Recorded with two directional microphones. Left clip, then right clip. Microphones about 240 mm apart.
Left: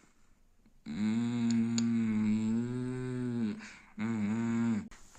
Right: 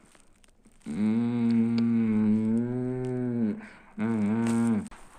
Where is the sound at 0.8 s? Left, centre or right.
Left.